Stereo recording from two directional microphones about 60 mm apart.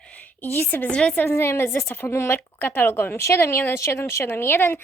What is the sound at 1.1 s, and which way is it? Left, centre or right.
A woman's voice, left.